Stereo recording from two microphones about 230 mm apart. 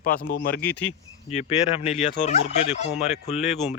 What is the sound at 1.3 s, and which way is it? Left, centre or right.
Turkey, left.